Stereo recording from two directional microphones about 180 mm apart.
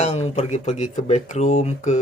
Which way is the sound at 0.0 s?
40° left (ahead or behind).